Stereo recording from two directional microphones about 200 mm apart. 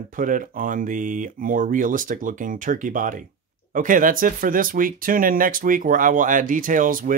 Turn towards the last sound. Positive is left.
turn(degrees=-40)  # may be behind; listen again after turning